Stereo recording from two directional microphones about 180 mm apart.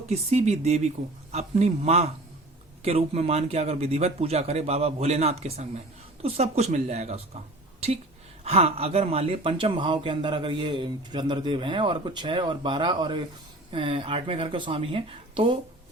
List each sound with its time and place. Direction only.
0.1 s speech: 35° right (ahead or behind)
8.4 s speech: 35° right (ahead or behind)